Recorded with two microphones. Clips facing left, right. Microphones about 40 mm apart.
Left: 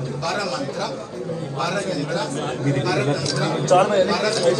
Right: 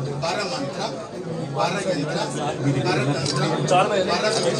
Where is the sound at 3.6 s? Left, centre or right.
Right.